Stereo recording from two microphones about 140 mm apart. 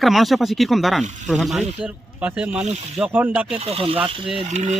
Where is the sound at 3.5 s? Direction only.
45° right (ahead or behind).